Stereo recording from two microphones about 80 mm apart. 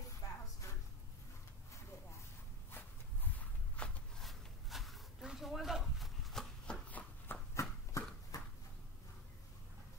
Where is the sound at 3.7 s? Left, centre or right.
Centre.